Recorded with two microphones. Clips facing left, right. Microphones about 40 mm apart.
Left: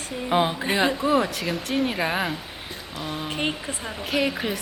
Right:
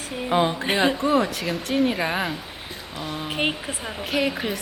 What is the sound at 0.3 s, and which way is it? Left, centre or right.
A woman's voice, centre.